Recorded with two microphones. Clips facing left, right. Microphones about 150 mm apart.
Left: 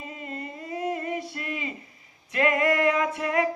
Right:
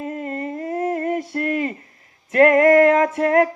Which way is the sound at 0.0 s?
50° right (ahead or behind).